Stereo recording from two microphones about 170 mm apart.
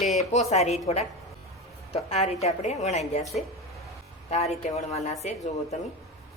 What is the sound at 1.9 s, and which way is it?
A woman's voice, 40° left (ahead or behind).